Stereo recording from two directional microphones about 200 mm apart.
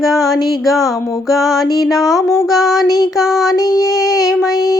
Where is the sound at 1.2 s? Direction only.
Centre (ahead or behind).